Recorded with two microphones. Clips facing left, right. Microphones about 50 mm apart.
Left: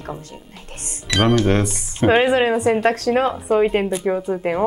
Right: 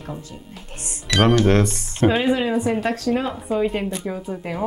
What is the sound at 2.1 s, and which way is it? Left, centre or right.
Speech, left.